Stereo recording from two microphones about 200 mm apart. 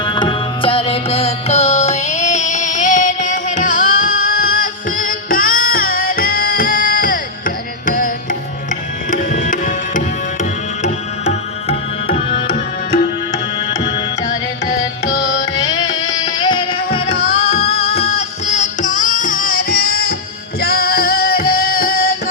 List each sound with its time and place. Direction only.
0.0 s music: 20° left (ahead or behind)
13.3 s music: 20° left (ahead or behind)
15.1 s carnatic music: 60° left (ahead or behind)
15.5 s music: 20° left (ahead or behind); by 22.1 s 45° left (ahead or behind)